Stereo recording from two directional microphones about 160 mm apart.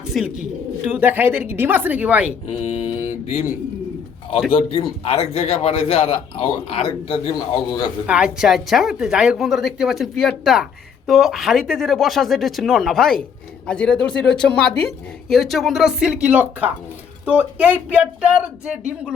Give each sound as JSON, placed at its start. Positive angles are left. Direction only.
{"t": 0.1, "sound": "speech", "side_deg": 0}
{"t": 2.5, "sound": "a man's voice", "side_deg": 40}
{"t": 4.5, "sound": "a man's voice", "side_deg": 35}
{"t": 8.0, "sound": "a woman's voice", "side_deg": -5}